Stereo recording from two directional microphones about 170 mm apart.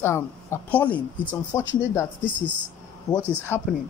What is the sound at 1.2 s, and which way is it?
Speech, 25° left (ahead or behind).